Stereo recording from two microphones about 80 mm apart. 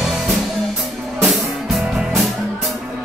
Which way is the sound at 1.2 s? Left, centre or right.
Centre.